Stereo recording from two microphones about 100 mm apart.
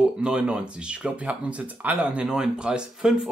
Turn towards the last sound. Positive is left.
turn(degrees=-5)  # may be behind; listen again after turning